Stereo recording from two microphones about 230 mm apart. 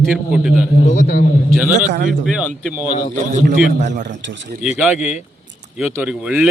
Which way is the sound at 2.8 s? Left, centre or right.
Right.